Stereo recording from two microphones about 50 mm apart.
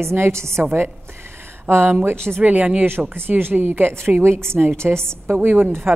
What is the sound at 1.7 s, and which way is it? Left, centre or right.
Speech, right.